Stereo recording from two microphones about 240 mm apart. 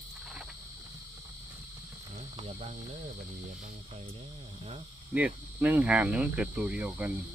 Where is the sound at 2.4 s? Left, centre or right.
Right.